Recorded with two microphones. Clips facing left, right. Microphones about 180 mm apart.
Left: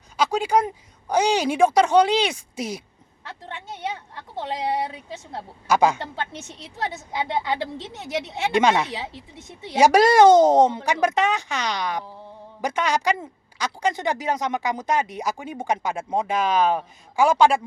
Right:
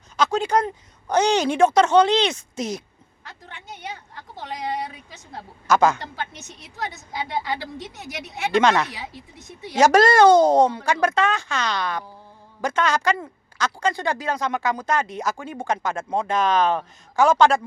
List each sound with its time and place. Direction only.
0.2 s speech: 10° left (ahead or behind)
4.4 s a woman's voice: 25° left (ahead or behind)
5.6 s a woman's voice: 15° left (ahead or behind)
6.4 s a woman's voice: 25° left (ahead or behind)
9.7 s a woman's voice: 10° left (ahead or behind)